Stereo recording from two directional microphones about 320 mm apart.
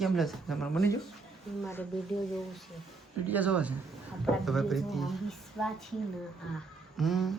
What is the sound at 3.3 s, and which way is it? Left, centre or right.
Speech, centre.